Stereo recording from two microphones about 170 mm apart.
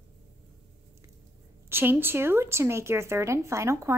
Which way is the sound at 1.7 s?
10° right (ahead or behind).